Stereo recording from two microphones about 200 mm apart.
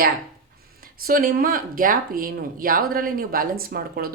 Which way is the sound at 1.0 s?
45° right (ahead or behind).